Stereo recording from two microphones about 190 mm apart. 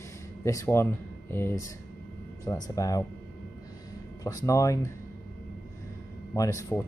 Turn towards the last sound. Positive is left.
turn(degrees=15)  # may be behind; listen again after turning